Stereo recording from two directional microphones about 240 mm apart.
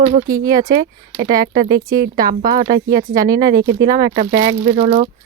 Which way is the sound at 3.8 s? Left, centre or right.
Centre.